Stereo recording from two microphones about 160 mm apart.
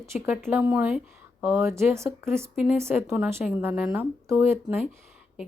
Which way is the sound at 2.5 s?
5° right (ahead or behind).